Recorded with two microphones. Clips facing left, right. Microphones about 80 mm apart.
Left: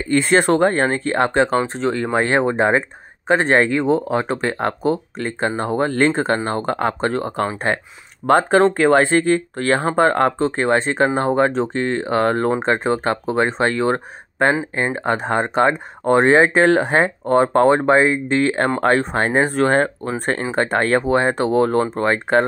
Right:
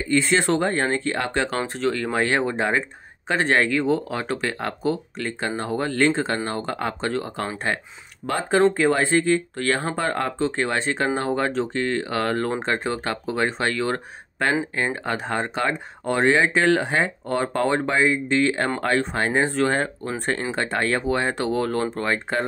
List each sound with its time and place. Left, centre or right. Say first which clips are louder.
0.1 s speech: left 5 dB; left
8.3 s speech: left 6 dB; left
9.6 s speech: left 7 dB; left